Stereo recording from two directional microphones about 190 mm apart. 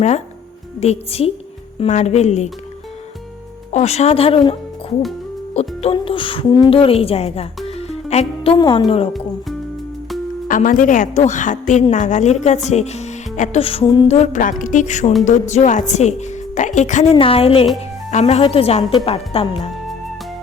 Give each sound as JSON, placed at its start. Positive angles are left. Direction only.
{"t": 0.8, "sound": "a woman's voice", "side_deg": 30}
{"t": 3.7, "sound": "a woman's voice", "side_deg": 35}
{"t": 5.5, "sound": "speech", "side_deg": 30}
{"t": 8.5, "sound": "speech", "side_deg": 20}
{"t": 10.5, "sound": "a woman's voice", "side_deg": 45}
{"t": 14.1, "sound": "a woman's voice", "side_deg": 40}